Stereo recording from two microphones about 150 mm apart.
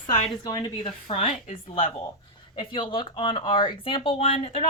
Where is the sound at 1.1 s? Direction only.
45° left (ahead or behind).